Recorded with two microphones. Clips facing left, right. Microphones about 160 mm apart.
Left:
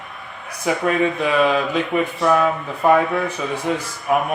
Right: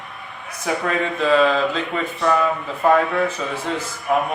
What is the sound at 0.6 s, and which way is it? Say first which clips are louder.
A man's voice: left 3 dB; 15° left (ahead or behind).